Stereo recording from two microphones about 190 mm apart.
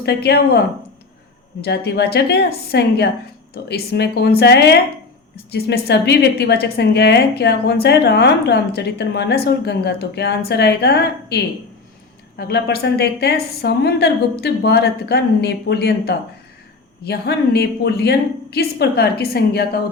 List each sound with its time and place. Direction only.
0.0 s a woman's voice: 60° left (ahead or behind)
1.6 s a woman's voice: 60° left (ahead or behind)